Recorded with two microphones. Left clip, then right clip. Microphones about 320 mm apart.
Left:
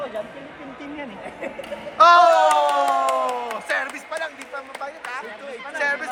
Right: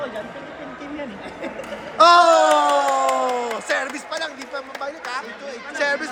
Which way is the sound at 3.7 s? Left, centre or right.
Centre.